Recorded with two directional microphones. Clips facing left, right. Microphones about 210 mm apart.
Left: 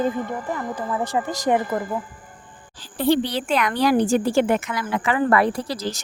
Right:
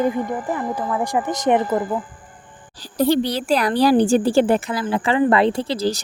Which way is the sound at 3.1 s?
40° right (ahead or behind).